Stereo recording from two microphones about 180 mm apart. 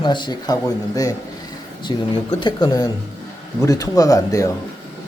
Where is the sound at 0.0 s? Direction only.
25° left (ahead or behind).